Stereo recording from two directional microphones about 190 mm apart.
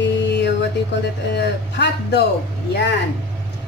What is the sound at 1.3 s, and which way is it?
Speech, 60° left (ahead or behind).